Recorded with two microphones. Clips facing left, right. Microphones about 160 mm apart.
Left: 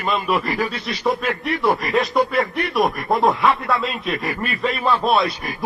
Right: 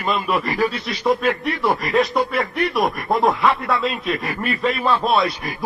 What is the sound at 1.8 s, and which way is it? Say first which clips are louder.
Speech: even; centre (ahead or behind).